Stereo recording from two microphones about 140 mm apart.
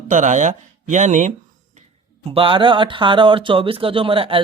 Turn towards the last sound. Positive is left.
turn(degrees=-40)  # may be behind; listen again after turning